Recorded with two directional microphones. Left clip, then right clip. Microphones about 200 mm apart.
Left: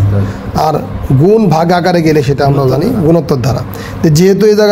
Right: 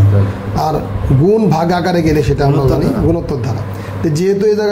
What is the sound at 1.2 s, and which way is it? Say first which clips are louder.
A man's voice: left 4 dB; 50° left (ahead or behind).